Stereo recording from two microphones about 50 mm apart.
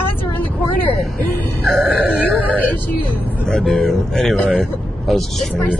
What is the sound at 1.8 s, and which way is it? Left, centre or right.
Music, right.